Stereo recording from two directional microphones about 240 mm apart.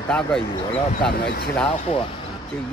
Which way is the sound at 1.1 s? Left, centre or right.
Left.